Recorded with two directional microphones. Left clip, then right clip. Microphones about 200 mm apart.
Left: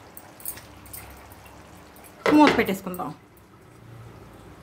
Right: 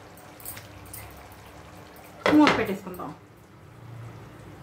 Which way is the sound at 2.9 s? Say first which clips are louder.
Left 5 dB; 55° left (ahead or behind).